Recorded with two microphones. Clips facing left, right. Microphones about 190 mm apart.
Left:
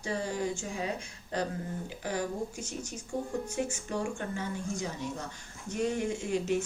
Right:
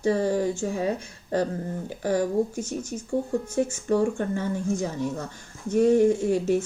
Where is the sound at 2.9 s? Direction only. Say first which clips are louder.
Right 8 dB; 50° right (ahead or behind).